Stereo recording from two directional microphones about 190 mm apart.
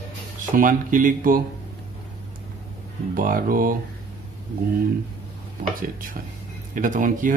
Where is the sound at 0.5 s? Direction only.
45° right (ahead or behind).